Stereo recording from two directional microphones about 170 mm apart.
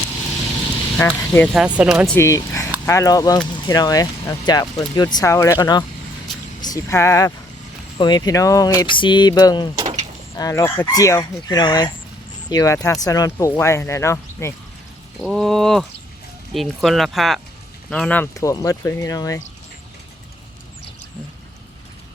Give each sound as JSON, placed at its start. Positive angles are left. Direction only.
{"t": 0.9, "sound": "speech", "side_deg": 10}
{"t": 1.5, "sound": "speech", "side_deg": -5}
{"t": 2.1, "sound": "speech", "side_deg": 20}
{"t": 15.2, "sound": "speech", "side_deg": 0}